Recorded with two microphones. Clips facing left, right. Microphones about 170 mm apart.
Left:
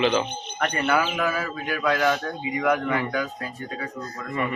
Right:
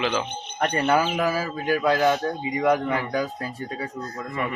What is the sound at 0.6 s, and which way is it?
A man's voice, 30° right (ahead or behind).